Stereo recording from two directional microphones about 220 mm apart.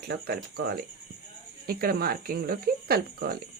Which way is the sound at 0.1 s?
45° right (ahead or behind).